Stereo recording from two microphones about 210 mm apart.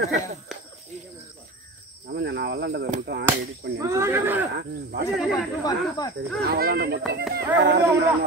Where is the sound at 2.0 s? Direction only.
50° right (ahead or behind).